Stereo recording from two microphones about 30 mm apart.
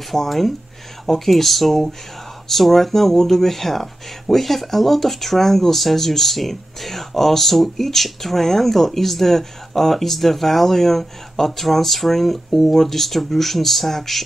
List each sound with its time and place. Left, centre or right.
0.1 s speech: centre